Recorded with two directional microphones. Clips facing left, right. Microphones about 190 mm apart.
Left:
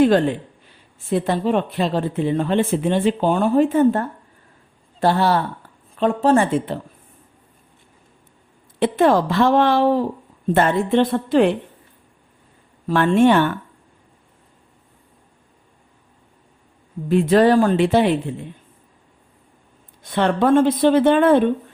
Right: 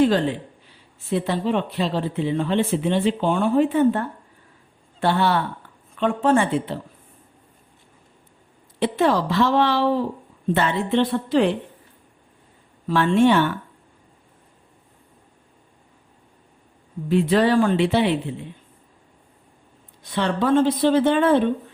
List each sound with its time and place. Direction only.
0.0 s speech: 55° left (ahead or behind)
8.8 s speech: 50° left (ahead or behind)
12.9 s speech: 50° left (ahead or behind)
17.1 s speech: 45° left (ahead or behind)
20.0 s speech: 55° left (ahead or behind)